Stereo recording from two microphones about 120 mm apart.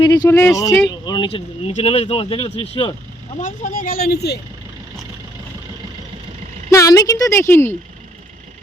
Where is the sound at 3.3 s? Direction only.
90° left.